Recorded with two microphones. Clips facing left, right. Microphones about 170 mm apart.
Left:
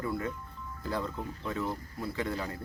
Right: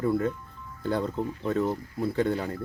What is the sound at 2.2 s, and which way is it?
Speech, 30° right (ahead or behind).